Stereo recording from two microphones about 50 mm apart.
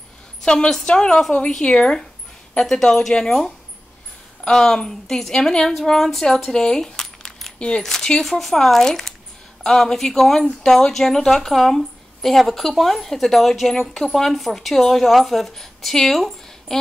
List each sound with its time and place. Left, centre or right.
0.4 s a woman's voice: centre
7.5 s a woman's voice: left; by 16.7 s centre